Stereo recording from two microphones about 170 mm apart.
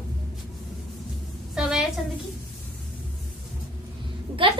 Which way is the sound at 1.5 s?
5° right (ahead or behind).